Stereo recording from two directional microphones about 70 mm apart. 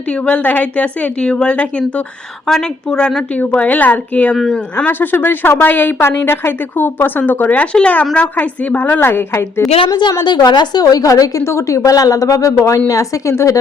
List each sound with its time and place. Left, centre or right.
0.3 s a woman's voice: left
3.6 s a woman's voice: left
9.9 s a woman's voice: left
11.4 s speech: left